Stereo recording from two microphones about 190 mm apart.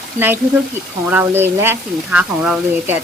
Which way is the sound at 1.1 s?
10° right (ahead or behind).